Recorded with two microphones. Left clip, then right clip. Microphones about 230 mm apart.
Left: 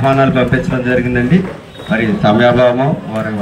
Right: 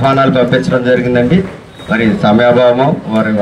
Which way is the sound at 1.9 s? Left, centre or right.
Right.